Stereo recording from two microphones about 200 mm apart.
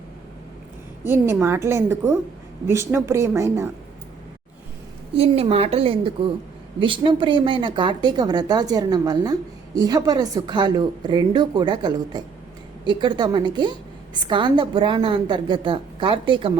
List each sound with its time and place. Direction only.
1.0 s a woman's voice: 10° right (ahead or behind)
5.1 s a woman's voice: 30° right (ahead or behind)